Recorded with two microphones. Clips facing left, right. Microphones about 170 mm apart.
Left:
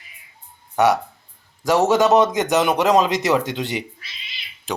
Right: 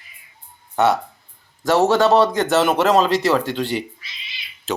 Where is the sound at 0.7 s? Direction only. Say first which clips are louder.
Even; 15° left (ahead or behind).